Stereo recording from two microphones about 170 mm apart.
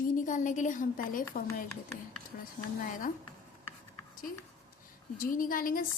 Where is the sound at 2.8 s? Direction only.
55° left (ahead or behind).